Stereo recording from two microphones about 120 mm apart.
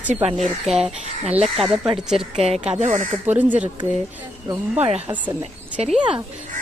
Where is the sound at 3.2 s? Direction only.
15° right (ahead or behind).